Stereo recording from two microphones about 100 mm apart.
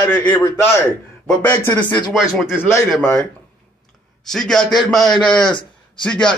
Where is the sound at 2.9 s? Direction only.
5° left (ahead or behind).